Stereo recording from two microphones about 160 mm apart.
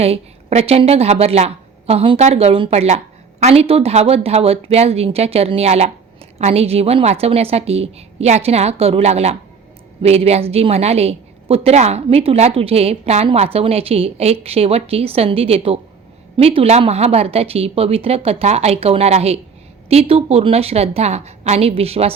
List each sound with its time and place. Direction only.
0.0 s a woman's voice: 40° right (ahead or behind)